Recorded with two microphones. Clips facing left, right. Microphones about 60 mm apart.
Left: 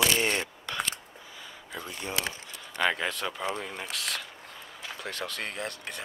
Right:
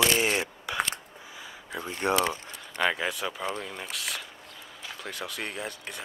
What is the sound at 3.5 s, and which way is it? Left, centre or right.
Speech, centre.